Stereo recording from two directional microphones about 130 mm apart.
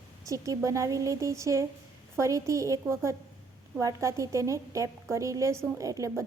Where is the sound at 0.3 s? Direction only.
25° right (ahead or behind).